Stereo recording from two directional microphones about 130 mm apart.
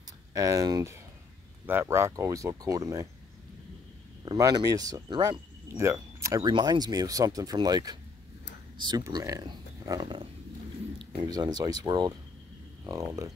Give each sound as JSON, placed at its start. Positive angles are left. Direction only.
{"t": 0.3, "sound": "speech", "side_deg": -25}
{"t": 4.2, "sound": "speech", "side_deg": -30}
{"t": 5.7, "sound": "speech", "side_deg": -20}